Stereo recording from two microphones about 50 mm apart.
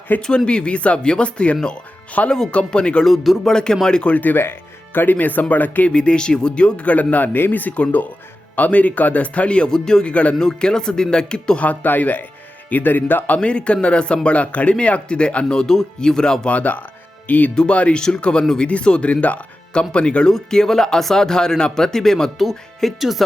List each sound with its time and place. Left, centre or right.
0.2 s speech: centre
3.0 s speech: centre
4.1 s speech: left
5.9 s speech: centre
10.1 s speech: left
10.3 s speech: centre
11.6 s speech: left
13.3 s speech: left
15.5 s speech: centre
16.5 s speech: left
17.5 s speech: centre
20.3 s speech: centre